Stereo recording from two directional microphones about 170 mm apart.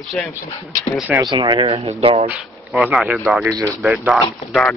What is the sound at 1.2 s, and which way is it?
Speech, 25° right (ahead or behind).